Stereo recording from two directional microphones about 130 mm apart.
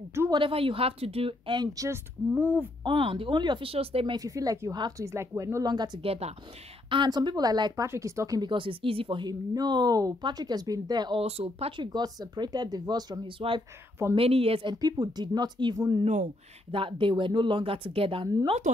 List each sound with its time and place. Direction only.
0.3 s speech: 45° right (ahead or behind)
1.6 s speech: 25° right (ahead or behind)
2.3 s speech: 15° right (ahead or behind)
2.8 s speech: 40° right (ahead or behind)
4.2 s speech: 25° right (ahead or behind)
6.0 s speech: 50° right (ahead or behind)
6.9 s speech: 35° right (ahead or behind)
11.1 s speech: 50° right (ahead or behind); by 13.3 s 30° right (ahead or behind)
14.1 s speech: 50° right (ahead or behind); by 16.0 s 30° right (ahead or behind)
16.7 s speech: 40° right (ahead or behind)